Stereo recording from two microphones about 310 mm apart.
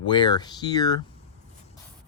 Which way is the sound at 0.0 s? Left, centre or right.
Centre.